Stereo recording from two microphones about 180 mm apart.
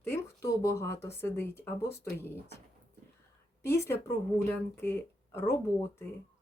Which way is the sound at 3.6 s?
15° left (ahead or behind).